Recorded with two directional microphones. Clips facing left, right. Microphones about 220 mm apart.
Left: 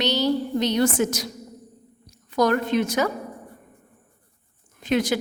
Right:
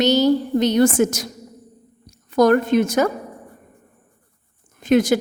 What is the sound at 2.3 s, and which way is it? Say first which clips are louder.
Speech: right 6 dB; 50° right (ahead or behind).